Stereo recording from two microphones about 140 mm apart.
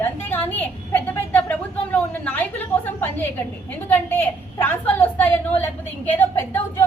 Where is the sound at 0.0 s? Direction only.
15° left (ahead or behind).